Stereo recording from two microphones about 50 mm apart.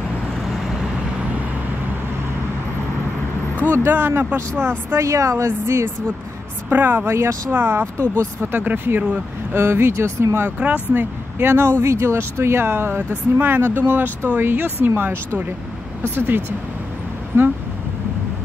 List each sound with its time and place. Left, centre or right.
3.5 s vehicle: left
3.9 s speech: right
4.9 s a woman's voice: right
6.7 s speech: right
7.1 s a woman's voice: right
7.5 s speech: right
8.5 s speech: right
9.5 s speech: right
10.6 s speech: right
11.0 s speech: right
11.8 s speech: right
17.3 s speech: right